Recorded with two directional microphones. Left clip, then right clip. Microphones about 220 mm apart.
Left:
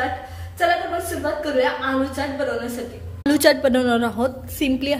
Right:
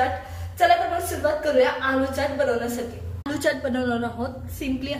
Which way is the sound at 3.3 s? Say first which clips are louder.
Left 8 dB; 40° left (ahead or behind).